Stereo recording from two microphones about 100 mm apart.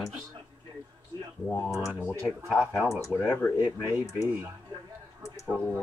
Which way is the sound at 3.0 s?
30° left (ahead or behind).